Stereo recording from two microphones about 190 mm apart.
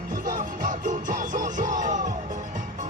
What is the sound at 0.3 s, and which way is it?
Music, 40° right (ahead or behind).